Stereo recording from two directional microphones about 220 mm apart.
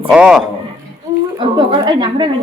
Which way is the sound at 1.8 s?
20° right (ahead or behind).